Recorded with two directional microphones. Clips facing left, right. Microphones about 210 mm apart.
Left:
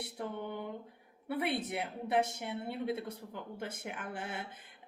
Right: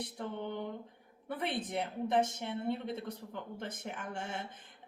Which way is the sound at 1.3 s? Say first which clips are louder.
Left 2 dB; 10° left (ahead or behind).